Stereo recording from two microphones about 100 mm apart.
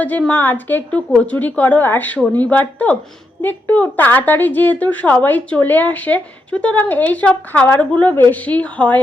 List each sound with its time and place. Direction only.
0.3 s a woman's voice: 20° left (ahead or behind)